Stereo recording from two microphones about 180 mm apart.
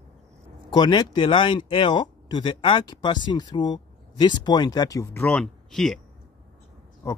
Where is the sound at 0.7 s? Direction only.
25° left (ahead or behind); by 5.9 s centre (ahead or behind).